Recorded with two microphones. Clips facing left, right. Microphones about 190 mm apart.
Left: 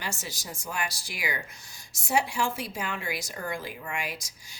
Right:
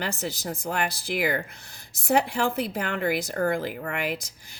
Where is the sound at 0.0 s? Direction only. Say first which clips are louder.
Right 7 dB; 60° right (ahead or behind).